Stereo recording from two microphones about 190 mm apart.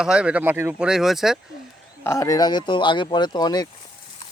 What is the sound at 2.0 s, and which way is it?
Speech, 15° left (ahead or behind).